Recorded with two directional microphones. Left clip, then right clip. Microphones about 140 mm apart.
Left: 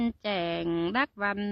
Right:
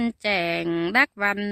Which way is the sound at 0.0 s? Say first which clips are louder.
Right 6 dB; 30° right (ahead or behind).